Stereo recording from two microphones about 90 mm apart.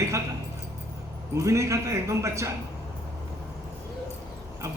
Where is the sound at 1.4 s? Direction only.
35° right (ahead or behind).